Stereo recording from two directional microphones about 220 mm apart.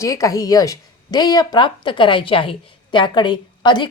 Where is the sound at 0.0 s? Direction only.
15° left (ahead or behind).